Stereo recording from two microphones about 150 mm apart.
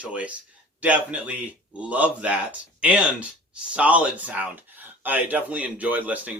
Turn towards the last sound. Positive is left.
turn(degrees=-10)  # may be behind; listen again after turning